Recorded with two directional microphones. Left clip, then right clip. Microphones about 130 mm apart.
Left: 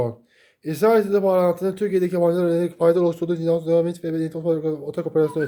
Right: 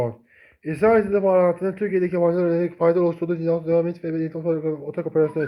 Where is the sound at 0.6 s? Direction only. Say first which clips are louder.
Even; 30° left (ahead or behind).